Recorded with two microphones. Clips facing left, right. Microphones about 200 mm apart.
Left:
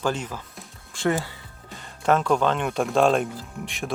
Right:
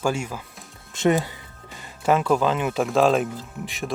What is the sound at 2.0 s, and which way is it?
Speech, 5° right (ahead or behind).